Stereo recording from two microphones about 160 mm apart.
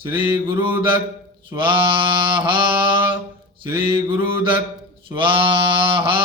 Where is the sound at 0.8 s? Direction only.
30° right (ahead or behind).